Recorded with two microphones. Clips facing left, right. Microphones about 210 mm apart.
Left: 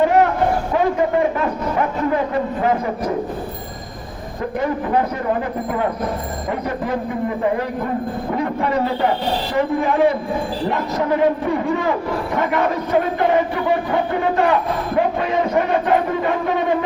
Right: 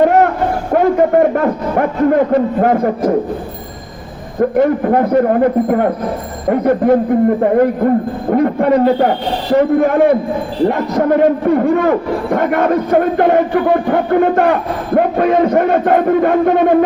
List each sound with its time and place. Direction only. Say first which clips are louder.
0.0 s a sound: right 4 dB; 50° right (ahead or behind)
0.7 s a man's voice: right 6 dB; 55° right (ahead or behind)
4.4 s a man's voice: right 10 dB; 55° right (ahead or behind)